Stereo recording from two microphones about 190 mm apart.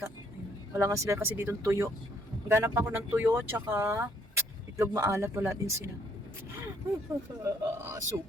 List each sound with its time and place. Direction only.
0.7 s speech: 15° right (ahead or behind)
7.4 s speech: 15° right (ahead or behind)